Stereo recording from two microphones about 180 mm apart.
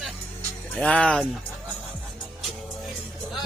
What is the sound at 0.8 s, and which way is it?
Speech, 5° left (ahead or behind).